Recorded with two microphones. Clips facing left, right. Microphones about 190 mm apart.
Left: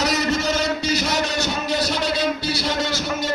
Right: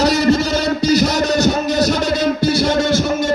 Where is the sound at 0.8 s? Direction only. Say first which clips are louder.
Right 8 dB; 40° right (ahead or behind).